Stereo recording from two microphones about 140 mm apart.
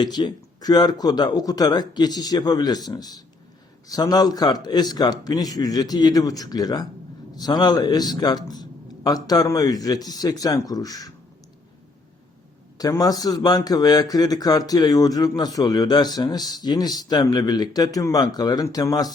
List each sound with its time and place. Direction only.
0.0 s a man's voice: 30° left (ahead or behind)
12.8 s a man's voice: 25° left (ahead or behind)